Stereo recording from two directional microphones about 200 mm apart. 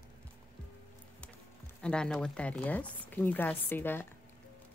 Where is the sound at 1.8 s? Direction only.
5° left (ahead or behind).